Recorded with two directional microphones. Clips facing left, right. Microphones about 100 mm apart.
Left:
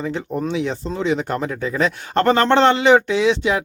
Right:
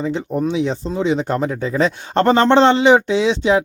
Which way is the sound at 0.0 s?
20° right (ahead or behind).